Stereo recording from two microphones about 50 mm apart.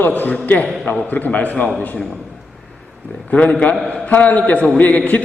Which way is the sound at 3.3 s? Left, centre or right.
Left.